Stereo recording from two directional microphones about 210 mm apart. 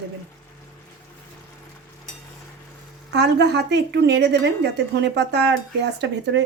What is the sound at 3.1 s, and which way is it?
A woman's voice, 50° right (ahead or behind).